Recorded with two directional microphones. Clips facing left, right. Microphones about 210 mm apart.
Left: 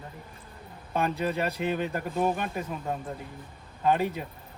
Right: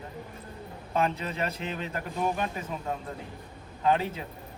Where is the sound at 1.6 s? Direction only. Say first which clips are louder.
Left 6 dB; 55° left (ahead or behind).